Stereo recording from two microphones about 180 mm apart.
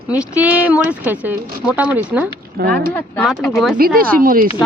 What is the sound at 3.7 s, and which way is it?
Speech, 55° right (ahead or behind).